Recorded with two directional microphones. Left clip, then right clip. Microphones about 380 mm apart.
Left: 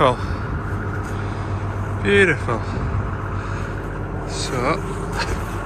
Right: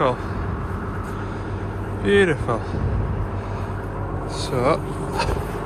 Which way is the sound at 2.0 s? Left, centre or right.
Centre.